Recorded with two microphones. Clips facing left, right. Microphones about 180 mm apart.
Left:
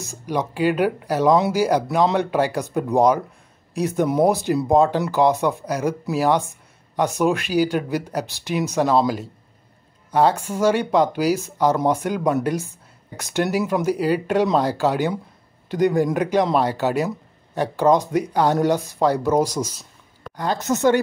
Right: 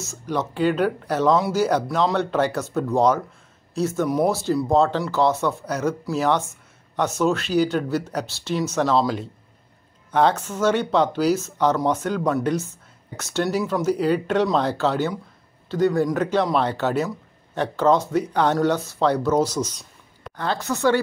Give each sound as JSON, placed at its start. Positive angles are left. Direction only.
{"t": 0.0, "sound": "a woman's voice", "side_deg": 15}